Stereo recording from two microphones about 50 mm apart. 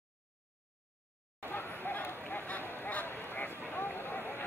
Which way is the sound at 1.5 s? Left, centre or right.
Left.